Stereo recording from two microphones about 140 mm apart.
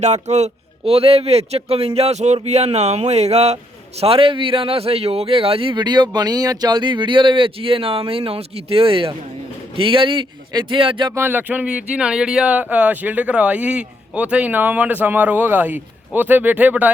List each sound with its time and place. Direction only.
0.0 s a man's voice: 55° right (ahead or behind); by 11.1 s 40° right (ahead or behind)
11.1 s speech: 15° right (ahead or behind)